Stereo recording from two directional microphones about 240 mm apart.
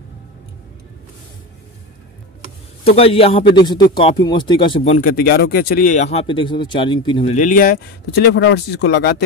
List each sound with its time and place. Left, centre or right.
2.8 s a man's voice: left